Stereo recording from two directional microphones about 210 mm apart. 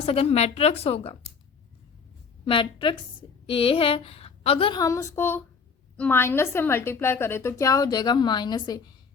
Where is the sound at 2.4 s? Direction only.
25° left (ahead or behind).